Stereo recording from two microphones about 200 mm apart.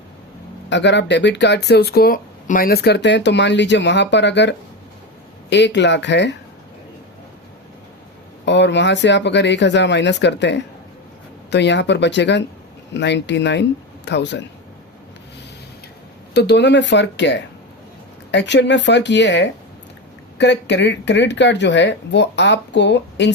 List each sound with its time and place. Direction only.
0.7 s speech: 60° left (ahead or behind)
8.4 s speech: 60° left (ahead or behind)
16.3 s speech: 60° left (ahead or behind)